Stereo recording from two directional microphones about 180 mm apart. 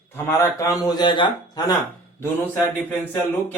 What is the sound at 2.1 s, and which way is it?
A man's voice, 10° left (ahead or behind).